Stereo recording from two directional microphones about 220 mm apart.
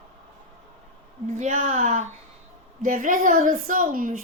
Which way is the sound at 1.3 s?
35° right (ahead or behind).